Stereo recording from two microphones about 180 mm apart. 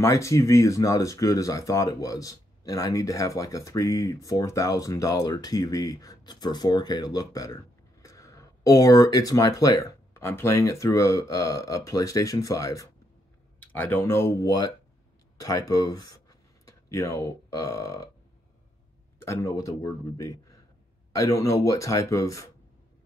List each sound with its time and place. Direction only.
0.0 s speech: 15° left (ahead or behind)
19.2 s speech: 15° left (ahead or behind)